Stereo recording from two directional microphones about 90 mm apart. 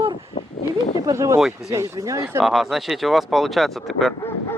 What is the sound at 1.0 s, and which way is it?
Speech, 35° right (ahead or behind).